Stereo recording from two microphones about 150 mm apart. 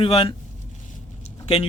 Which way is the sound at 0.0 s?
40° left (ahead or behind).